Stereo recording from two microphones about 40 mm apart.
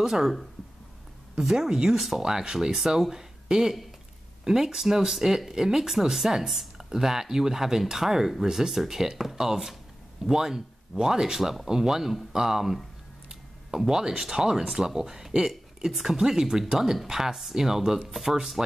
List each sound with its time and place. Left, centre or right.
0.0 s speech: centre
1.4 s speech: centre
13.3 s a sound: centre
14.2 s speech: centre